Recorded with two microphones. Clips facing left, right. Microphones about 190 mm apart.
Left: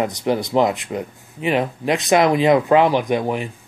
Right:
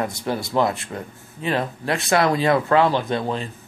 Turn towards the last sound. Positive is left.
turn(degrees=15)  # may be behind; listen again after turning